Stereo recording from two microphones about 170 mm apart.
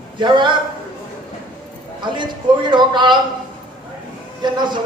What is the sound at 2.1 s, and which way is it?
Speech, 25° right (ahead or behind).